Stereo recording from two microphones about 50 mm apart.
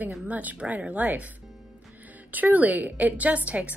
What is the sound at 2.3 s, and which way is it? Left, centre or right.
A woman's voice, right.